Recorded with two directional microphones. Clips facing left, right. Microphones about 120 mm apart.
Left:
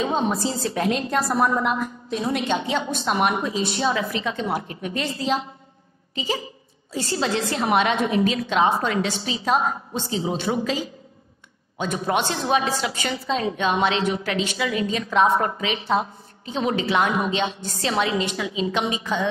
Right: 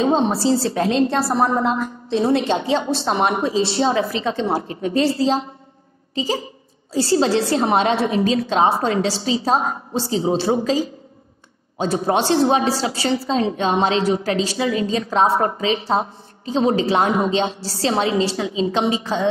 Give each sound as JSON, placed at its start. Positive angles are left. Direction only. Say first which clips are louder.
{"t": 0.0, "sound": "a woman's voice", "louder": "right 5 dB", "side_deg": -30}